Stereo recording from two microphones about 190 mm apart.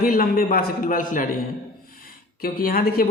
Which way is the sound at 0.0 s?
50° left (ahead or behind).